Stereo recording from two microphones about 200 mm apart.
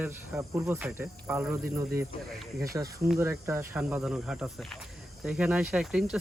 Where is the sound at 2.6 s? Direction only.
15° right (ahead or behind).